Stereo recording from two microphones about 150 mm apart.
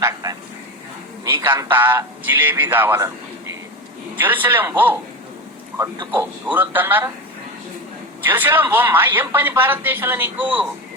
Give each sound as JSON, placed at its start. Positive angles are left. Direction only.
{"t": 0.0, "sound": "vehicle", "side_deg": -25}
{"t": 1.5, "sound": "a man's voice", "side_deg": -25}
{"t": 1.7, "sound": "speech", "side_deg": -15}
{"t": 4.2, "sound": "speech", "side_deg": -15}
{"t": 8.2, "sound": "speech", "side_deg": -15}